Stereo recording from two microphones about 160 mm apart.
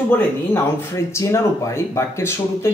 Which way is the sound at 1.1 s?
15° left (ahead or behind).